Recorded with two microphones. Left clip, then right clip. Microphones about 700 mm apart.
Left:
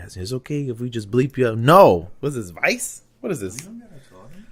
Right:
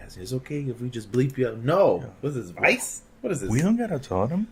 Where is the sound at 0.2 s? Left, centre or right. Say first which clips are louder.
Left 4 dB; left.